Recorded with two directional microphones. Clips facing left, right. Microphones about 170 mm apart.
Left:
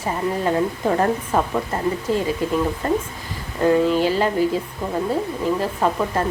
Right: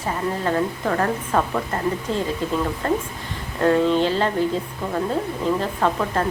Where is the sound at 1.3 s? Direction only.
10° left (ahead or behind).